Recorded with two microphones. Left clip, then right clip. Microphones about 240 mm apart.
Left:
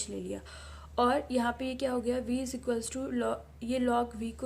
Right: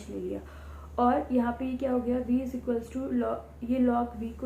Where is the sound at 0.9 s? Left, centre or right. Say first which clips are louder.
Right 2 dB; left.